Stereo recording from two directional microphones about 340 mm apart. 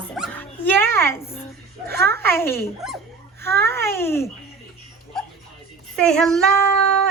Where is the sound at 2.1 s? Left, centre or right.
Centre.